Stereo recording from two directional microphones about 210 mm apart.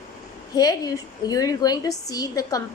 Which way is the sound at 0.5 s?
20° left (ahead or behind).